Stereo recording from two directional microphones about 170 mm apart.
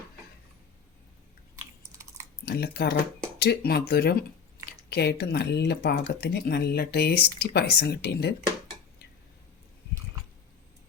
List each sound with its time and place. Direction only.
2.4 s speech: 75° left (ahead or behind)